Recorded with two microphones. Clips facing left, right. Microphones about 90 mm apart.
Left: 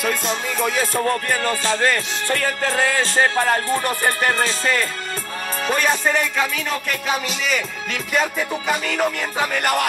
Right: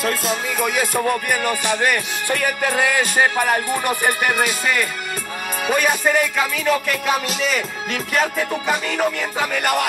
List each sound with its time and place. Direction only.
0.0 s music: 5° right (ahead or behind)